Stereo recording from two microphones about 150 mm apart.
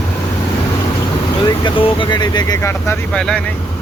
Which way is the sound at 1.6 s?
35° left (ahead or behind).